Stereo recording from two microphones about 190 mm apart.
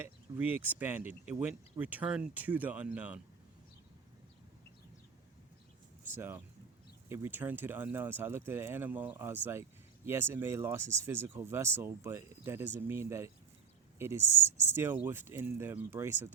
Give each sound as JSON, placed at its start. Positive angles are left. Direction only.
{"t": 0.0, "sound": "speech", "side_deg": -10}
{"t": 6.1, "sound": "speech", "side_deg": -10}
{"t": 14.2, "sound": "speech", "side_deg": 35}
{"t": 14.8, "sound": "speech", "side_deg": -10}